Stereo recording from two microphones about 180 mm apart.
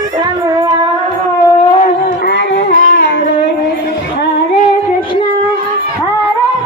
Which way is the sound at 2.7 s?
50° left (ahead or behind).